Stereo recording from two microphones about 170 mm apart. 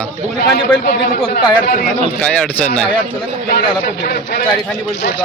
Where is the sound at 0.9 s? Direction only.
60° left (ahead or behind).